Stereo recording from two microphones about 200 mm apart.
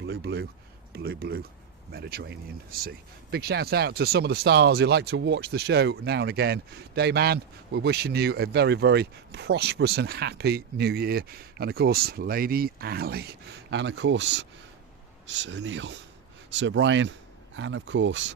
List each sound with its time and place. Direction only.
0.0 s a sound: 55° right (ahead or behind)
0.9 s speech: 50° right (ahead or behind)
3.3 s speech: 55° right (ahead or behind)